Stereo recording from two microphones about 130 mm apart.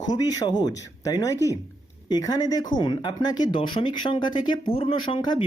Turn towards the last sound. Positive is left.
turn(degrees=35)  # may be behind; listen again after turning